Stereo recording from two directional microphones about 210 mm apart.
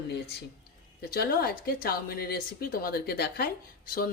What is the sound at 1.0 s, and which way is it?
Speech, 45° left (ahead or behind).